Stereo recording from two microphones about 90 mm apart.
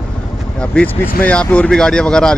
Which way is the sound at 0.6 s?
15° left (ahead or behind).